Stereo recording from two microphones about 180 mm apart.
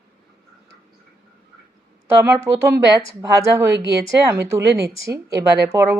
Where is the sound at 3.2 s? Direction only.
15° right (ahead or behind).